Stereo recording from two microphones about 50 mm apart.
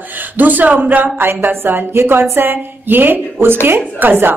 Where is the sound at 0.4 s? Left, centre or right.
Right.